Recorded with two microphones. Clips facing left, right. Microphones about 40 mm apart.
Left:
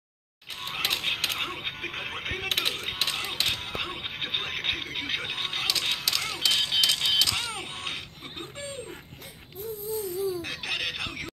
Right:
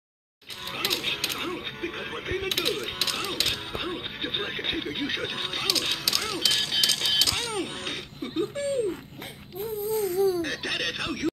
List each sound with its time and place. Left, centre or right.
0.7 s a sound: left
1.2 s music: left
3.5 s music: left
5.2 s speech: left
6.3 s cash register: left
9.8 s a sound: right
10.4 s speech: left